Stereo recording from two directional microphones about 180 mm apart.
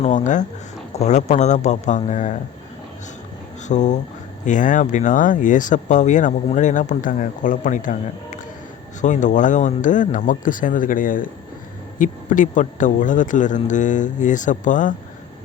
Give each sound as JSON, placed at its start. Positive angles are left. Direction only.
{"t": 0.0, "sound": "speech", "side_deg": 45}
{"t": 3.7, "sound": "speech", "side_deg": 40}